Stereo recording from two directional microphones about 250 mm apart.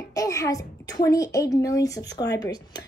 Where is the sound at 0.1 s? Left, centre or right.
Centre.